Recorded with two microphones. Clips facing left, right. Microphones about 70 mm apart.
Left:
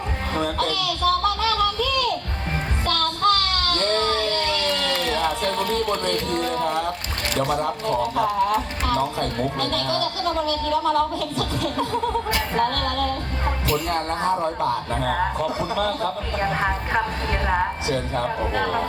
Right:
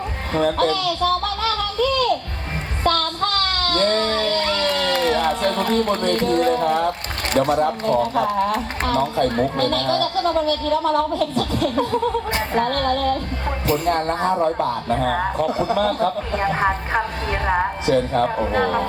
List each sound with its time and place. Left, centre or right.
0.3 s speech: right
1.4 s music: right
2.8 s child singing: right
7.3 s speech: right
13.7 s music: right
14.8 s speech: right
16.6 s a woman's voice: centre
17.8 s speech: right